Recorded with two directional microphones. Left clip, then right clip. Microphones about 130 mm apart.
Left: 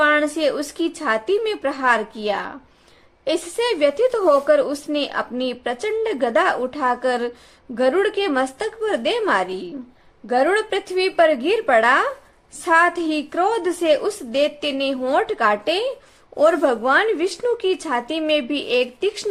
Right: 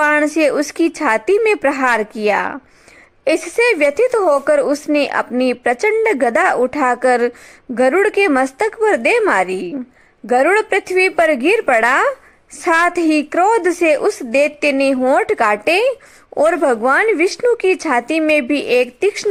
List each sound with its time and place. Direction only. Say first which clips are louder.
0.0 s a woman's voice: right 4 dB; 55° right (ahead or behind)